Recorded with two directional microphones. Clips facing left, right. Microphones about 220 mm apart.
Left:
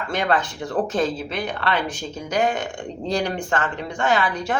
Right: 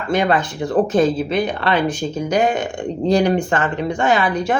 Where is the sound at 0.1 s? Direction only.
10° right (ahead or behind).